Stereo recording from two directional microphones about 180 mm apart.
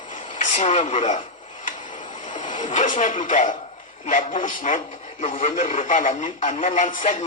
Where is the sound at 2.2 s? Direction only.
45° left (ahead or behind).